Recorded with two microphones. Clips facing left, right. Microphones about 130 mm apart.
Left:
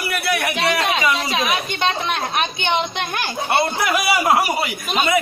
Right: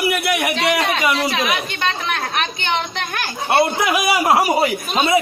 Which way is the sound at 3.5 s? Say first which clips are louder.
Right 3 dB; 20° right (ahead or behind).